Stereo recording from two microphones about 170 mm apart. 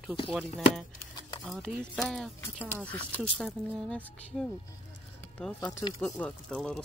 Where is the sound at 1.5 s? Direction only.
Centre (ahead or behind).